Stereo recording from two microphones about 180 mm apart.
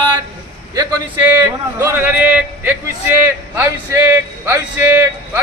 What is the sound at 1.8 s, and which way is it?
A man's voice, 10° right (ahead or behind).